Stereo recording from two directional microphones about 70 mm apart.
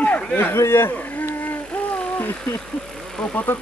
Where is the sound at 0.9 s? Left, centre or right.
Left.